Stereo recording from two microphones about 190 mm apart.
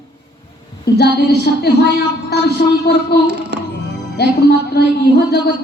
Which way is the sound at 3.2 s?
60° right (ahead or behind).